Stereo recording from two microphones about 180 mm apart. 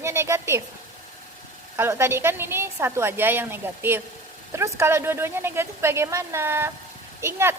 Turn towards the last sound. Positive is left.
turn(degrees=-15)  # may be behind; listen again after turning